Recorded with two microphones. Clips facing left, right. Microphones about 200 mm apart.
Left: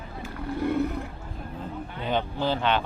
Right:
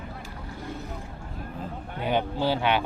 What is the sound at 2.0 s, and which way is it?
Speech, 10° right (ahead or behind).